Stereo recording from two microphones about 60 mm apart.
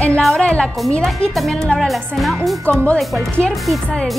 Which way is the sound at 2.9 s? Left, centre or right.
Centre.